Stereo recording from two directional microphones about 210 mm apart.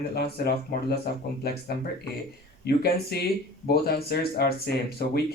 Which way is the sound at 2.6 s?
50° left (ahead or behind).